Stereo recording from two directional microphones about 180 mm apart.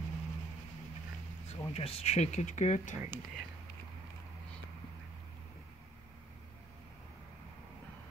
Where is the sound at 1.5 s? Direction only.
30° left (ahead or behind).